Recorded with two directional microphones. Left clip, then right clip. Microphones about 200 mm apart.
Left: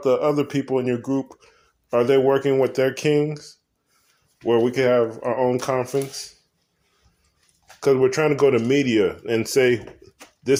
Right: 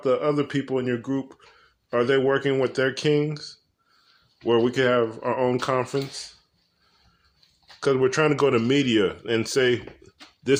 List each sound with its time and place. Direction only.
0.0 s speech: 5° left (ahead or behind)
7.8 s speech: 5° right (ahead or behind)